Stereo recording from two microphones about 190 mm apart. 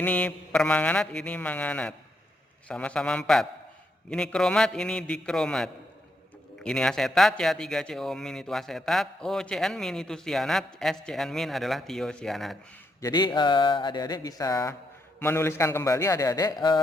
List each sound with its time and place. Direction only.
0.0 s mantra: 10° left (ahead or behind)
2.6 s speech: 5° left (ahead or behind)
13.0 s a sound: 20° left (ahead or behind)
15.2 s mantra: 15° left (ahead or behind)